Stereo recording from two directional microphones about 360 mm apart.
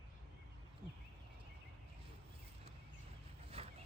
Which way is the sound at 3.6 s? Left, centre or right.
Centre.